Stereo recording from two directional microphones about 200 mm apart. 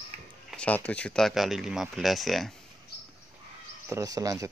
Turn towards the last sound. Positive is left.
turn(degrees=-15)  # may be behind; listen again after turning